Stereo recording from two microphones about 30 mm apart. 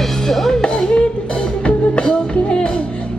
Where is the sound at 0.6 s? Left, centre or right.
Left.